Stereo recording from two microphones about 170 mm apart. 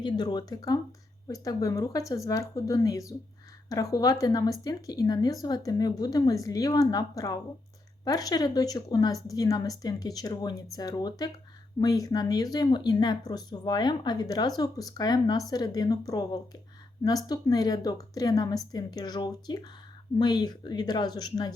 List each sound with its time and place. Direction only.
0.0 s speech: 25° left (ahead or behind)